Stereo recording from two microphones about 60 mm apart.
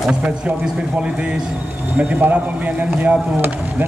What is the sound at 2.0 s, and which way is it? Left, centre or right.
Speech, right.